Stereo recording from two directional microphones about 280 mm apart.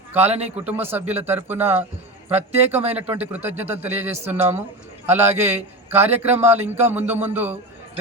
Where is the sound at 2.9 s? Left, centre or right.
Centre.